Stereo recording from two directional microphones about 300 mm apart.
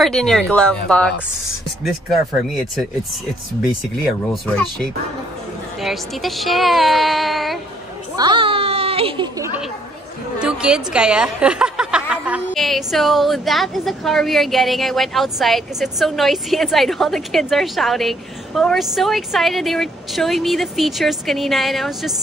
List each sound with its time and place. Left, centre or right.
0.0 s a woman's voice: centre
4.3 s a woman's voice: centre
8.2 s a sound: centre
10.4 s a woman's voice: centre